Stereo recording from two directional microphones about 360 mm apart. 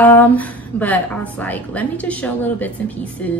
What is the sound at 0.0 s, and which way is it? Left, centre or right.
A woman's voice, centre.